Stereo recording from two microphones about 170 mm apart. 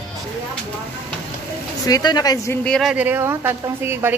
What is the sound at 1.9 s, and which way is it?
Speech, 25° left (ahead or behind).